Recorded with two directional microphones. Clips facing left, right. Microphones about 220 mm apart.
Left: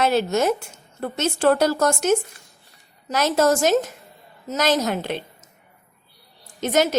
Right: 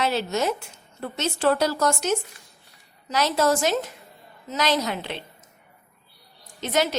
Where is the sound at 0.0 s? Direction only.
50° left (ahead or behind).